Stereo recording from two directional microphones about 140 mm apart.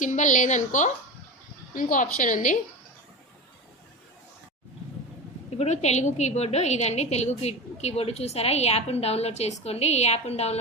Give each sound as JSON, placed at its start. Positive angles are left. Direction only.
{"t": 0.0, "sound": "a woman's voice", "side_deg": 60}
{"t": 1.7, "sound": "a woman's voice", "side_deg": 70}
{"t": 5.5, "sound": "a woman's voice", "side_deg": 55}